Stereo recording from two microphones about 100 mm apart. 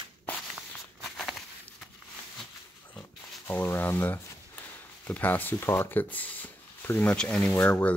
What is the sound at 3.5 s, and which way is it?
Speech, 20° left (ahead or behind).